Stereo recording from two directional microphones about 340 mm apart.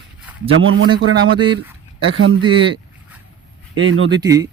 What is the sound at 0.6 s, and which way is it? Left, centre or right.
Speech, right.